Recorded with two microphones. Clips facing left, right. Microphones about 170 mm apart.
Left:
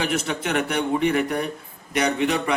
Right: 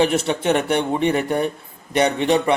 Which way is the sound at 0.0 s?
30° right (ahead or behind).